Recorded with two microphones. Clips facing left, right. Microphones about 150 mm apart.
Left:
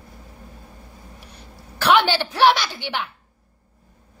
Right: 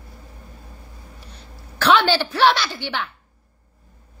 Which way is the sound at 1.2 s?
10° left (ahead or behind).